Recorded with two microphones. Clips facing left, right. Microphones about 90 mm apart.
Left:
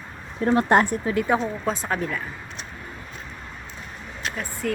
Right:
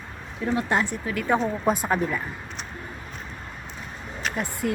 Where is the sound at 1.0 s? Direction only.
25° left (ahead or behind).